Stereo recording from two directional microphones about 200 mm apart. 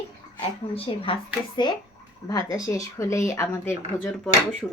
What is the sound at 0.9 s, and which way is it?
Speech, 25° left (ahead or behind).